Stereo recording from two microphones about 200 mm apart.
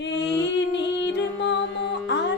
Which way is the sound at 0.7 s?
60° left (ahead or behind).